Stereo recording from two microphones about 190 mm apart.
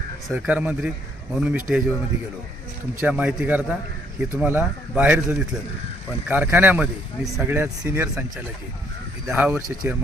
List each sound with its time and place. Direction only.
0.3 s speech: 10° right (ahead or behind)
3.0 s speech: 5° right (ahead or behind)
9.2 s speech: 10° right (ahead or behind)